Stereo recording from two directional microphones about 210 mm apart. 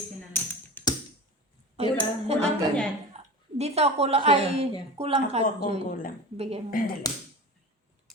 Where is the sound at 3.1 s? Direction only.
30° right (ahead or behind).